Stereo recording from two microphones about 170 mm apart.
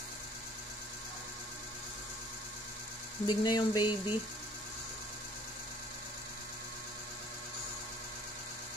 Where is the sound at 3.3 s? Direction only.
25° left (ahead or behind).